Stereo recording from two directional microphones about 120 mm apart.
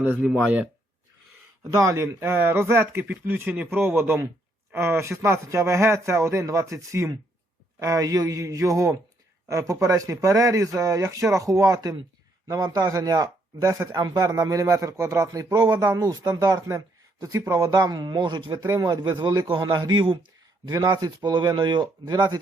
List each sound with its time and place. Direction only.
0.0 s speech: 15° right (ahead or behind)
1.6 s a man's voice: 25° right (ahead or behind); by 18.6 s 40° right (ahead or behind)
18.6 s speech: 30° right (ahead or behind)